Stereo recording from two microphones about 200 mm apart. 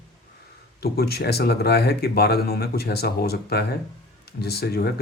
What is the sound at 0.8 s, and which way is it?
Speech, 55° left (ahead or behind).